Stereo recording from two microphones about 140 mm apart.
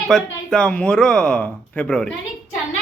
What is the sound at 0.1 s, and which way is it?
Speech, 5° left (ahead or behind).